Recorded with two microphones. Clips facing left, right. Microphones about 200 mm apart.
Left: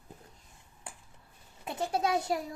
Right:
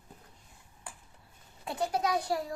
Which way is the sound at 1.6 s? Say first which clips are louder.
Even; 25° left (ahead or behind).